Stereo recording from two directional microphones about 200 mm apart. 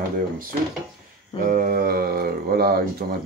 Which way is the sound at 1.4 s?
45° right (ahead or behind).